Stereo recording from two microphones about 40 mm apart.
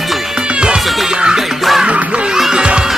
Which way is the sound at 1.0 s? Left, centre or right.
Centre.